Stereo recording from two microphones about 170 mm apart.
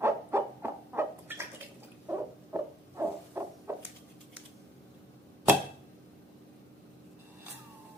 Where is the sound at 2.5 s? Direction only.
15° right (ahead or behind).